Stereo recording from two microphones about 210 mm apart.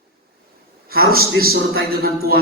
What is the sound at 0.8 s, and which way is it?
A man's voice, 45° right (ahead or behind).